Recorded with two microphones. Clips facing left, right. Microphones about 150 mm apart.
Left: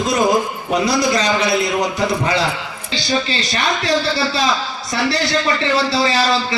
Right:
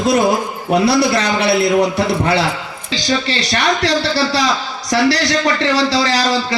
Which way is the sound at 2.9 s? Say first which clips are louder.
Right 2 dB; 75° right (ahead or behind).